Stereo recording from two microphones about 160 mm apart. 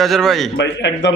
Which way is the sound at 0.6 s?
90° left.